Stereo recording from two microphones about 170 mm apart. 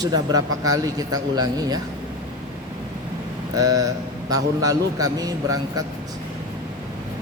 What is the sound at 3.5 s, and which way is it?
A man's voice, 20° right (ahead or behind).